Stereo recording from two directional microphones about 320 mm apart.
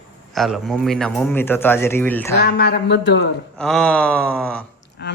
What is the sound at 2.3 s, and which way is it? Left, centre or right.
Speech, left.